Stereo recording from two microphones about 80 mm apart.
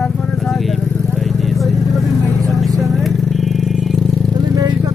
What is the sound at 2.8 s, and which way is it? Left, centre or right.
Vehicle, centre.